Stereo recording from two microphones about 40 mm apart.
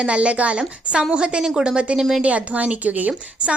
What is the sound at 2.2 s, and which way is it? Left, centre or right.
Speech, right.